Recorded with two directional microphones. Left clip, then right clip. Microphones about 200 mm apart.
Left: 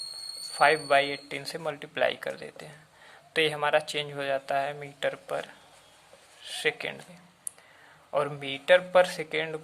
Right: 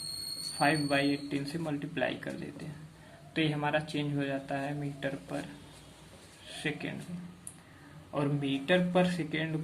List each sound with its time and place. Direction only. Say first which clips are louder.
0.6 s a man's voice: left 7 dB; 55° left (ahead or behind)
6.6 s speech: left 7 dB; 55° left (ahead or behind)
8.1 s a man's voice: left 4 dB; 55° left (ahead or behind)